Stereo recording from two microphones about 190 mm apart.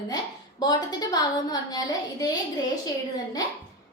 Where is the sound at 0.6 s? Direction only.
20° left (ahead or behind).